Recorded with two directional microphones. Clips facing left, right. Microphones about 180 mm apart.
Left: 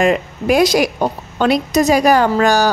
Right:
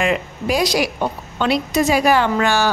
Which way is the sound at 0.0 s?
45° left (ahead or behind).